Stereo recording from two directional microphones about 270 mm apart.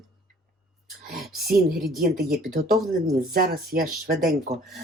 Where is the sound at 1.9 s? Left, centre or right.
Right.